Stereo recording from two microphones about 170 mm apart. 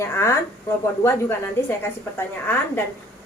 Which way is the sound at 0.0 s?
15° left (ahead or behind).